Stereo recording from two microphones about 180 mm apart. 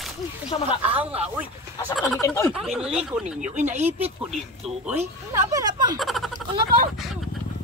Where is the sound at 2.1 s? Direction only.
15° left (ahead or behind).